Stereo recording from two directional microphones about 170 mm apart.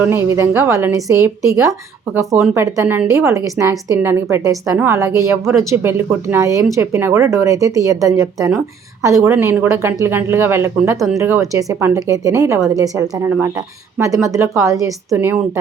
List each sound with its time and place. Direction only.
0.0 s a woman's voice: 15° right (ahead or behind)